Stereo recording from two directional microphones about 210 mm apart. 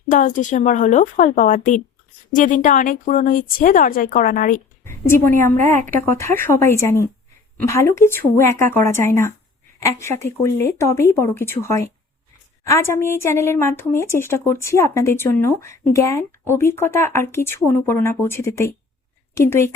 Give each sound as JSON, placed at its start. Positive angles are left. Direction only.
{"t": 0.1, "sound": "speech", "side_deg": 35}
{"t": 4.9, "sound": "a woman's voice", "side_deg": 10}